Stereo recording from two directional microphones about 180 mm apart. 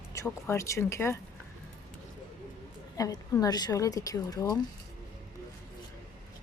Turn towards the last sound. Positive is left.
turn(degrees=20)  # may be behind; listen again after turning